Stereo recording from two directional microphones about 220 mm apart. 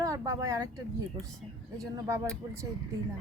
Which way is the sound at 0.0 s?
15° right (ahead or behind).